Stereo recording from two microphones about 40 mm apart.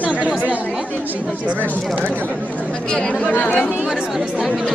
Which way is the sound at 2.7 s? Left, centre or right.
Left.